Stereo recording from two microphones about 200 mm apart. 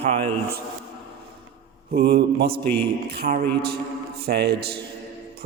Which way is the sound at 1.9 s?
50° right (ahead or behind).